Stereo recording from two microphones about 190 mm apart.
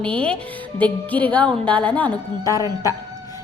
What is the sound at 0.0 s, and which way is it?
A woman's voice, 5° left (ahead or behind).